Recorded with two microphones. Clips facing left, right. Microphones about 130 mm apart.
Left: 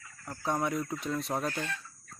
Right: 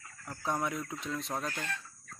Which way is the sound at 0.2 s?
Centre (ahead or behind).